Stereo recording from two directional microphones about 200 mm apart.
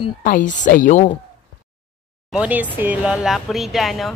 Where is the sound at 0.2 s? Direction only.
40° left (ahead or behind).